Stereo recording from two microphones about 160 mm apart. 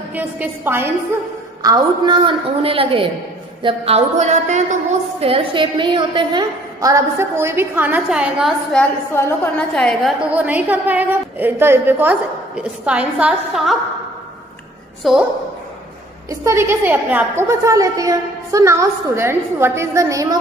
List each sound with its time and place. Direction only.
0.1 s a woman's voice: 10° right (ahead or behind)
1.6 s a woman's voice: 25° right (ahead or behind); by 4.7 s 45° right (ahead or behind)
5.2 s a woman's voice: 35° right (ahead or behind); by 8.8 s centre (ahead or behind)
9.1 s a woman's voice: 10° left (ahead or behind)
10.3 s a woman's voice: 10° right (ahead or behind)
15.0 s a woman's voice: centre (ahead or behind)
16.3 s a woman's voice: 15° right (ahead or behind)